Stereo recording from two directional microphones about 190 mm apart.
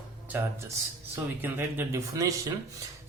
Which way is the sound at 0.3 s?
10° right (ahead or behind).